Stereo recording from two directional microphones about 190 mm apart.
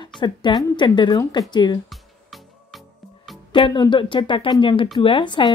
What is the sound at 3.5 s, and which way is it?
Speech, 25° left (ahead or behind).